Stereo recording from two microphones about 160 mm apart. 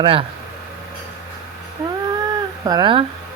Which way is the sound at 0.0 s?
35° right (ahead or behind).